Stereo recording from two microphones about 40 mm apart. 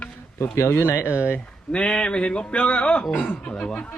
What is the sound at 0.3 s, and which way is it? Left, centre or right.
Speech, left.